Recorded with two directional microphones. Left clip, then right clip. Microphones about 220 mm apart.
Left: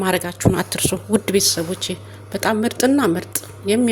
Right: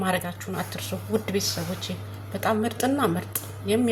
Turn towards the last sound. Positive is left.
turn(degrees=40)  # may be behind; listen again after turning